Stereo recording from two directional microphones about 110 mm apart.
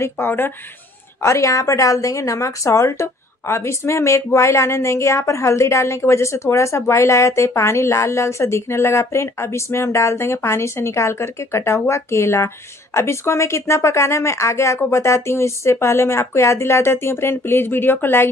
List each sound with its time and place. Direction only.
0.0 s a woman's voice: 20° left (ahead or behind)